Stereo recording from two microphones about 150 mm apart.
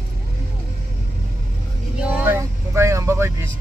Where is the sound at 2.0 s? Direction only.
15° right (ahead or behind).